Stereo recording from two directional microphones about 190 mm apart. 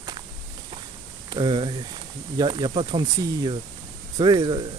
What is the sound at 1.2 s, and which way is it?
Speech, 25° right (ahead or behind).